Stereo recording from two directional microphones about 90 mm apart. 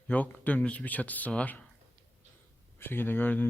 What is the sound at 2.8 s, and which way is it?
Speech, 25° left (ahead or behind).